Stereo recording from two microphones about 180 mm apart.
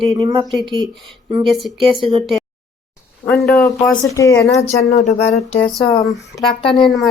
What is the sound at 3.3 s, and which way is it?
Speech, 60° left (ahead or behind).